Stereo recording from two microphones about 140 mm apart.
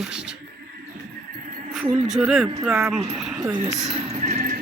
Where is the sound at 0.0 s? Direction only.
5° right (ahead or behind).